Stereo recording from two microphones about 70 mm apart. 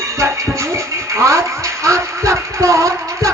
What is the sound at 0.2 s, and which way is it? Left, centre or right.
Speech, right.